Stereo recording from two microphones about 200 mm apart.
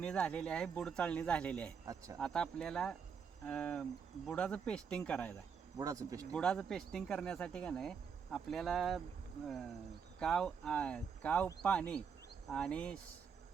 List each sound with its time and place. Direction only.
0.0 s speech: 5° left (ahead or behind)
1.8 s speech: 15° right (ahead or behind)
2.1 s speech: 5° left (ahead or behind)
5.7 s speech: 15° right (ahead or behind)
6.3 s speech: 5° left (ahead or behind)